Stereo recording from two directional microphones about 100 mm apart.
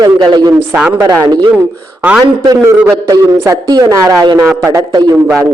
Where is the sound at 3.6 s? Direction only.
45° right (ahead or behind).